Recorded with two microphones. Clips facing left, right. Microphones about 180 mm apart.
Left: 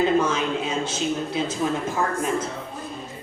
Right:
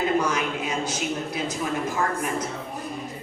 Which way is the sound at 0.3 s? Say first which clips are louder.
Left 2 dB; 25° left (ahead or behind).